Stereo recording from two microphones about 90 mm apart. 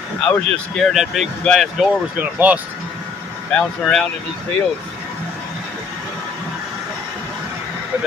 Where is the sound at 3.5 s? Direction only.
5° left (ahead or behind).